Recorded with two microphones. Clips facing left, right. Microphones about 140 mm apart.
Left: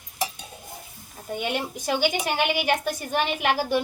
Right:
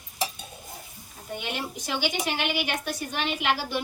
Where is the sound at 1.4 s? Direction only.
50° left (ahead or behind).